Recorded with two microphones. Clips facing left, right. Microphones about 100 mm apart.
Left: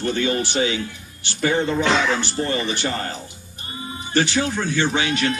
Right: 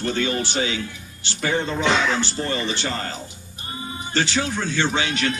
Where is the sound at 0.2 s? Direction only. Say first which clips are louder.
Left 4 dB; 20° left (ahead or behind).